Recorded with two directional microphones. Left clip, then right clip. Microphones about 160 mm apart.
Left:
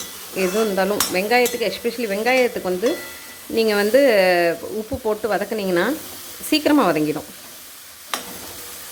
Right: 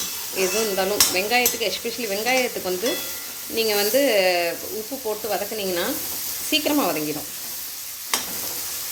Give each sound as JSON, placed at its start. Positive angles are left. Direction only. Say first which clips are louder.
{"t": 0.3, "sound": "stir", "louder": "left 3 dB", "side_deg": 45}